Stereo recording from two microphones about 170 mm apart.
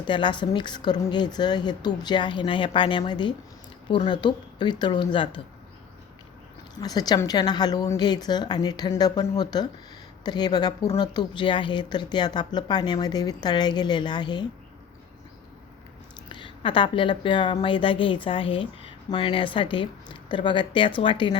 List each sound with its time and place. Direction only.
0.0 s a woman's voice: 30° left (ahead or behind)
6.8 s a woman's voice: 25° left (ahead or behind)
16.3 s a woman's voice: 30° left (ahead or behind)